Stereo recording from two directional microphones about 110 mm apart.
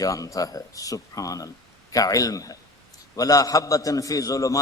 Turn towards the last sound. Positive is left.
turn(degrees=30)  # may be behind; listen again after turning